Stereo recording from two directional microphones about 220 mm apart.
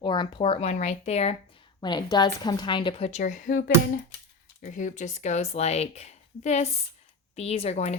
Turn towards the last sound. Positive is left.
turn(degrees=30)  # may be behind; listen again after turning